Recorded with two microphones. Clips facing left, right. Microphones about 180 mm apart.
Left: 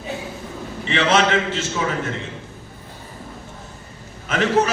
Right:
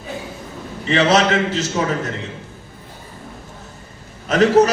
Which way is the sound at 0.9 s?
40° right (ahead or behind).